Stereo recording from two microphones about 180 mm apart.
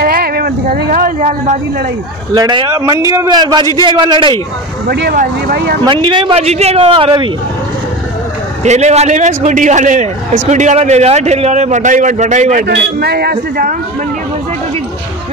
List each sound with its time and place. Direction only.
0.0 s speech: 60° right (ahead or behind)
2.3 s a man's voice: 25° right (ahead or behind)
4.8 s speech: 60° right (ahead or behind)
5.9 s a man's voice: 25° right (ahead or behind)
8.6 s a man's voice: 40° right (ahead or behind)
12.6 s speech: 65° right (ahead or behind)